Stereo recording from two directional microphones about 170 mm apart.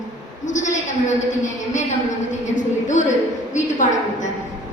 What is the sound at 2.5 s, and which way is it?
A woman's voice, 45° left (ahead or behind).